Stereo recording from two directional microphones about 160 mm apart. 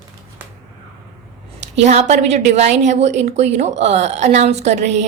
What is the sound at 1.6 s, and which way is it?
A woman's voice, 45° right (ahead or behind).